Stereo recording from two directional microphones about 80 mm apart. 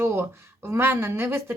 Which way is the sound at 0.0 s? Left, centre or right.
Right.